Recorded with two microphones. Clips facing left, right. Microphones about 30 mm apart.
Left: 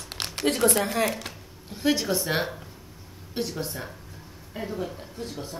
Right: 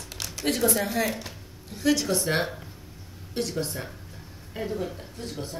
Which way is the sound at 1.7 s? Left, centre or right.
Left.